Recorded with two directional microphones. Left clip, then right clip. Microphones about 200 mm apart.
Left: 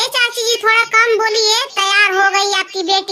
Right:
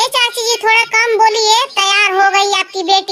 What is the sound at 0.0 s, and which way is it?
Child singing, 5° right (ahead or behind).